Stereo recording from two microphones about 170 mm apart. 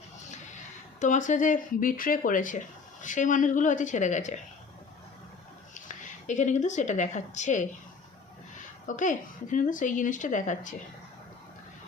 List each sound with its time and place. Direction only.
0.9 s speech: 45° left (ahead or behind)
5.7 s speech: 45° left (ahead or behind)